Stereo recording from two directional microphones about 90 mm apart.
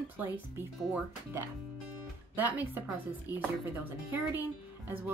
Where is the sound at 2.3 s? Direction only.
20° right (ahead or behind).